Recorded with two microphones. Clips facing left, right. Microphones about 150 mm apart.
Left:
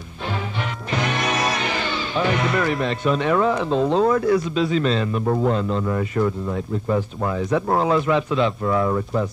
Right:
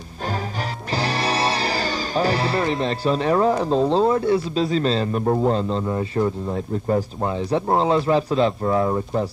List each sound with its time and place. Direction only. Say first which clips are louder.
0.9 s a man's voice: even; 35° right (ahead or behind)